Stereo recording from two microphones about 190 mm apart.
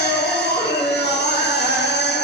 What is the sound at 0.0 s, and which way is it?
Music, 60° left (ahead or behind).